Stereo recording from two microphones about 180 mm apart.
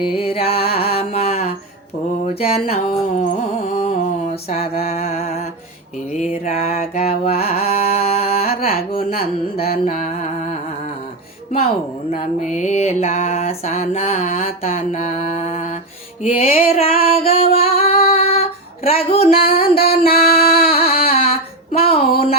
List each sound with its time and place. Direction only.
0.0 s mantra: 30° left (ahead or behind)
3.2 s music: 40° left (ahead or behind)
4.4 s mantra: 35° left (ahead or behind)
8.4 s carnatic music: 55° left (ahead or behind)
9.1 s mantra: 35° left (ahead or behind)
12.5 s mantra: 40° left (ahead or behind)
17.7 s singing: 35° left (ahead or behind)
18.1 s female singing: 35° left (ahead or behind)
19.5 s music: 55° left (ahead or behind)
19.9 s mantra: 35° left (ahead or behind)
20.1 s music: 55° left (ahead or behind)
20.6 s music: 30° left (ahead or behind)